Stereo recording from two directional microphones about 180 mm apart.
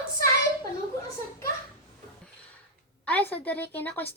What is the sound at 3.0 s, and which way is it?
A woman's voice, 10° left (ahead or behind).